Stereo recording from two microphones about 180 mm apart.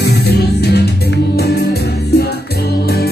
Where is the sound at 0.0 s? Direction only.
65° left (ahead or behind).